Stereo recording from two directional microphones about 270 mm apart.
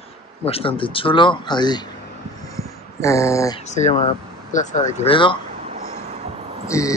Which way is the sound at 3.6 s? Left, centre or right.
Left.